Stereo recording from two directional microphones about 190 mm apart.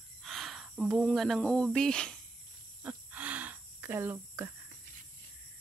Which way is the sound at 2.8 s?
10° right (ahead or behind).